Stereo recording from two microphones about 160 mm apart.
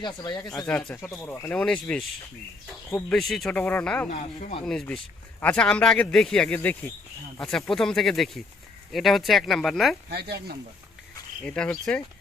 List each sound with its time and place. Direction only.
0.0 s speech: 25° left (ahead or behind); by 2.0 s 5° left (ahead or behind)
3.1 s speech: centre (ahead or behind)
4.1 s speech: 50° left (ahead or behind)
4.6 s speech: 5° left (ahead or behind)
10.1 s speech: 90° right
11.4 s speech: 5° left (ahead or behind)